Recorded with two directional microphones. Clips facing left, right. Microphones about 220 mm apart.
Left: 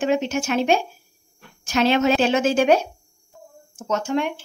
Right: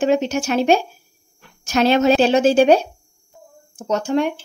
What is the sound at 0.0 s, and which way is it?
Speech, 40° right (ahead or behind).